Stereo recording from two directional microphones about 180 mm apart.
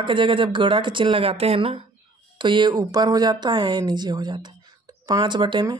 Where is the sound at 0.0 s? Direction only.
25° right (ahead or behind).